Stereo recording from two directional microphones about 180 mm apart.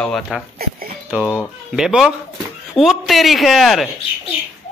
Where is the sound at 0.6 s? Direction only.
55° right (ahead or behind).